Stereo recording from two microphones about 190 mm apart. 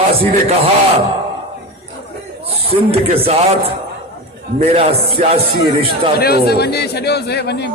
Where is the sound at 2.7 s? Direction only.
30° right (ahead or behind).